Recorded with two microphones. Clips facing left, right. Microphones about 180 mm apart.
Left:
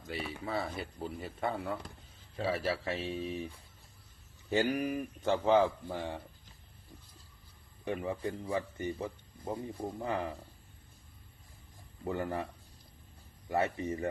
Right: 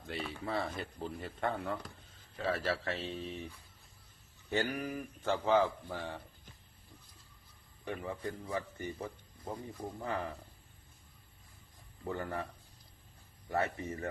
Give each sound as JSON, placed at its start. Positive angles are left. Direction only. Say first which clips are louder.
{"t": 0.1, "sound": "speech", "louder": "left 1 dB", "side_deg": 5}
{"t": 4.4, "sound": "speech", "louder": "left 4 dB", "side_deg": 15}
{"t": 7.9, "sound": "speech", "louder": "left 4 dB", "side_deg": 20}
{"t": 12.0, "sound": "speech", "louder": "left 3 dB", "side_deg": 20}
{"t": 13.5, "sound": "speech", "louder": "left 3 dB", "side_deg": 15}